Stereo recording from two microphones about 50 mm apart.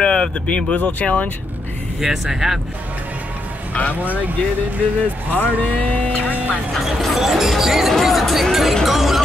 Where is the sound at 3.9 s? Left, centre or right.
Right.